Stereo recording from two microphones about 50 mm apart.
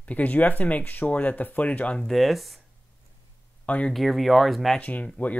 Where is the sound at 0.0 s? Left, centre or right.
Left.